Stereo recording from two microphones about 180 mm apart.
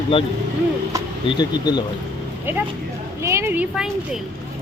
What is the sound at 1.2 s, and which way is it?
Speech, 25° left (ahead or behind).